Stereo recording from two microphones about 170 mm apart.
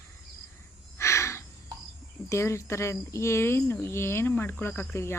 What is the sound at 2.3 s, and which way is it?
Speech, 15° left (ahead or behind).